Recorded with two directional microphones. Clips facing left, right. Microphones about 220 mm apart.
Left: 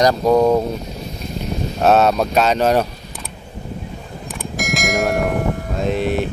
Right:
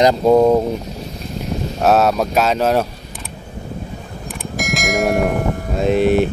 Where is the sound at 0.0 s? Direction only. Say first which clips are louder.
Right 2 dB; 25° right (ahead or behind).